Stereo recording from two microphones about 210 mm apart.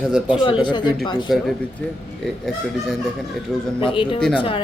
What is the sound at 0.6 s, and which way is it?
Speech, 20° left (ahead or behind).